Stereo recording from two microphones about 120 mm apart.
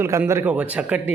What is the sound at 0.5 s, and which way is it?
Speech, 10° right (ahead or behind).